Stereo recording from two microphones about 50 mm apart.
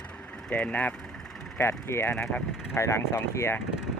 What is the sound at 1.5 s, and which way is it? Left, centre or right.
Speech, left.